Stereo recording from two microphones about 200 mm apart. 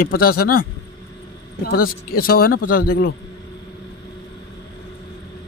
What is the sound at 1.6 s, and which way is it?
A man's voice, 45° left (ahead or behind).